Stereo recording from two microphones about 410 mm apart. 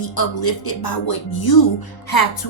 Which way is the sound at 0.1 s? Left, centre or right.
Left.